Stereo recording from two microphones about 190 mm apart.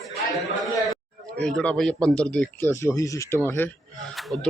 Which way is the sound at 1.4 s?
5° left (ahead or behind).